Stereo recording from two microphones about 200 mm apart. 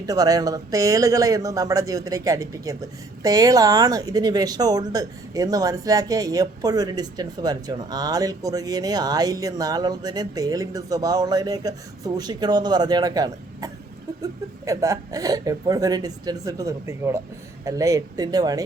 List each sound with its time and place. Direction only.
0.0 s speech: 20° right (ahead or behind)